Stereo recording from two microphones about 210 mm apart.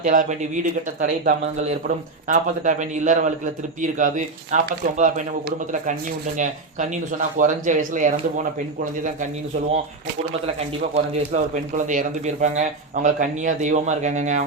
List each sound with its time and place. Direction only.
0.0 s speech: 35° right (ahead or behind)
10.9 s speech: 35° right (ahead or behind)